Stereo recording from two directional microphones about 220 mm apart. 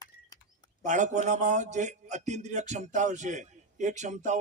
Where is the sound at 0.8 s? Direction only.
35° right (ahead or behind).